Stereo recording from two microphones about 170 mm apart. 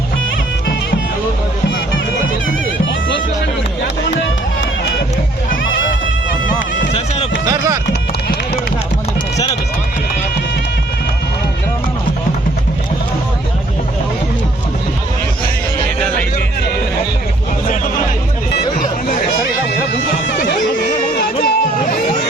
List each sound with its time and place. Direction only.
7.4 s a sound: 20° right (ahead or behind)
18.8 s hubbub: 50° left (ahead or behind)
20.8 s music: 50° left (ahead or behind)